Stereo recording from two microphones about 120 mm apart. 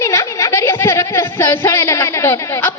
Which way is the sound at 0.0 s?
25° left (ahead or behind).